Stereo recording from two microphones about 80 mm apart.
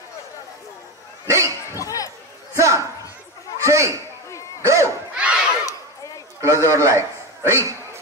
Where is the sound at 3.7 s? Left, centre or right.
Right.